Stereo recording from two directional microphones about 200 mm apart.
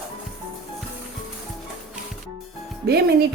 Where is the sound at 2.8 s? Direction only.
55° right (ahead or behind).